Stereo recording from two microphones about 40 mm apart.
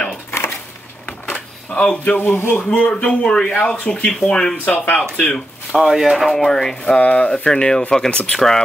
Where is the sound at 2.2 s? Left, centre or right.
Left.